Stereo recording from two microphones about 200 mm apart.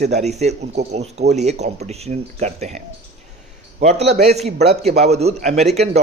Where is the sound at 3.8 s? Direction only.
35° right (ahead or behind).